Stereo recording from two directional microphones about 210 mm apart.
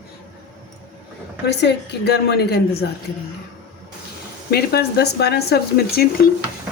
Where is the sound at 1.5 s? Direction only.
55° left (ahead or behind).